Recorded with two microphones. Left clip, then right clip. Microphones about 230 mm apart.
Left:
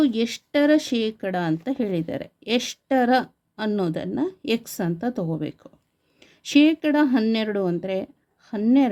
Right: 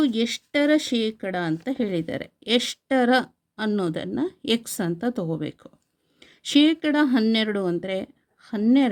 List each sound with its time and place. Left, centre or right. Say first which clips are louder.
0.0 s speech: left 1 dB; centre